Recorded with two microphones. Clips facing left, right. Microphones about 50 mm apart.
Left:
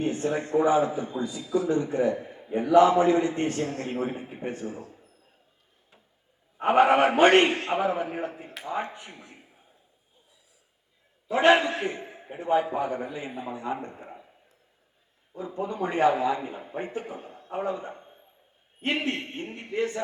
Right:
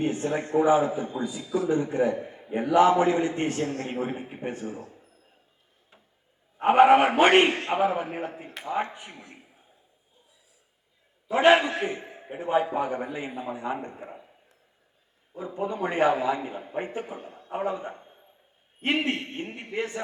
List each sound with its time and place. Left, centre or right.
0.0 s a man's voice: centre
6.6 s a man's voice: centre
11.3 s a man's voice: centre
15.4 s a man's voice: centre
19.0 s a man's voice: right